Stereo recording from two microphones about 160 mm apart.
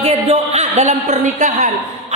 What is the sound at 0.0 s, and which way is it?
A woman's voice, 40° right (ahead or behind).